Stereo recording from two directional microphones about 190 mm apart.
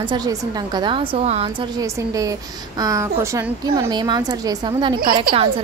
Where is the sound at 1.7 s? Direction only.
20° right (ahead or behind).